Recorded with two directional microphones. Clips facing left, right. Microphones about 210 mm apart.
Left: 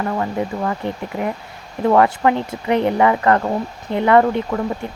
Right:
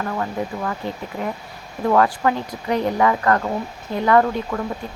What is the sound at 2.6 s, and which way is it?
Speech, 65° left (ahead or behind).